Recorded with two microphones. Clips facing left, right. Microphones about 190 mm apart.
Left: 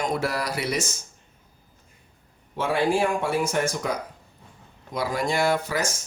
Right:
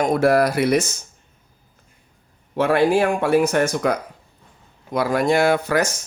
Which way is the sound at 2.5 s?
65° right (ahead or behind).